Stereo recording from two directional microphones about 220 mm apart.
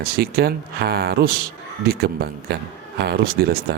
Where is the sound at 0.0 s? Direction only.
45° right (ahead or behind).